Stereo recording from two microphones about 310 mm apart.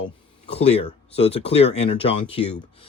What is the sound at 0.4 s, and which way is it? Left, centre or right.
Speech, centre.